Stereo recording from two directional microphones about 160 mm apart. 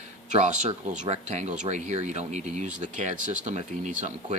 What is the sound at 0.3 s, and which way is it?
Speech, 50° right (ahead or behind).